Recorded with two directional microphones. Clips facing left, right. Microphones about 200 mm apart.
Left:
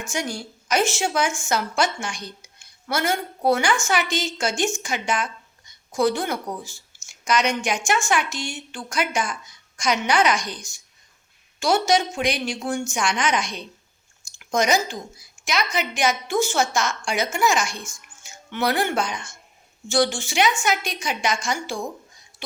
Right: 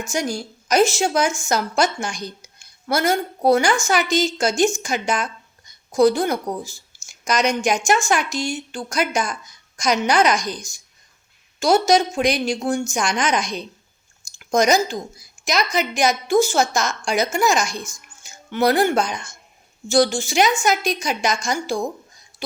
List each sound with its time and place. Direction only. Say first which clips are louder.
0.1 s a woman's voice: right 4 dB; 40° right (ahead or behind)